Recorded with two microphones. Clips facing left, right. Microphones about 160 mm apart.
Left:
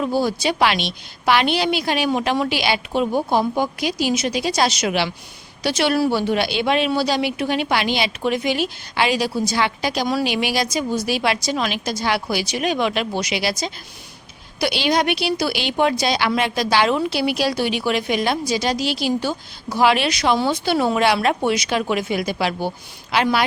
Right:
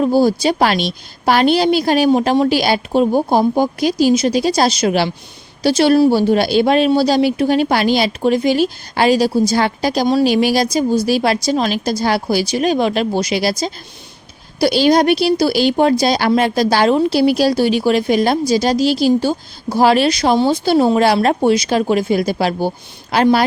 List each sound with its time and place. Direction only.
0.0 s a woman's voice: 35° right (ahead or behind)